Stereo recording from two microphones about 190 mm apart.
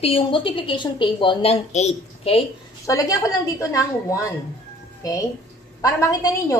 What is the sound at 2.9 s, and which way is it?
A woman's voice, 15° left (ahead or behind).